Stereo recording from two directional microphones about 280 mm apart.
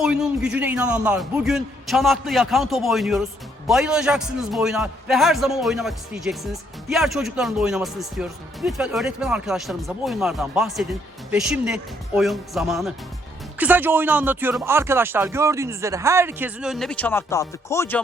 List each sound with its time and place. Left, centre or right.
0.0 s a man's voice: centre